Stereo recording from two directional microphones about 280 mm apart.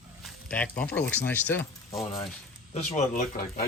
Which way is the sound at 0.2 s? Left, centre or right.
Centre.